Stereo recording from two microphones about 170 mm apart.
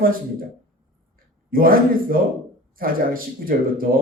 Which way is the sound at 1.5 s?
60° right (ahead or behind).